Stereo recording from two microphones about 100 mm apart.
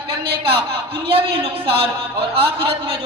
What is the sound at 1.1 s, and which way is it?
A man's voice, 60° right (ahead or behind).